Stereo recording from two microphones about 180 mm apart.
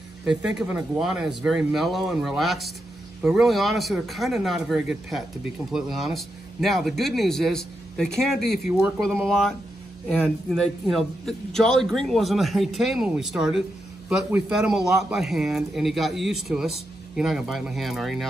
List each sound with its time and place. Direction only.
0.2 s a man's voice: 5° right (ahead or behind)